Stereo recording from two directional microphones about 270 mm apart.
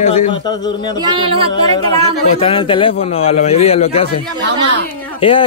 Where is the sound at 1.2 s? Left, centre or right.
Right.